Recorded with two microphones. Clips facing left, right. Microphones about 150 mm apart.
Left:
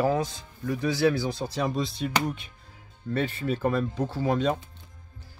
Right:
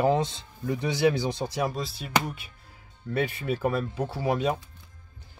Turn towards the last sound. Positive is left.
turn(degrees=-10)  # may be behind; listen again after turning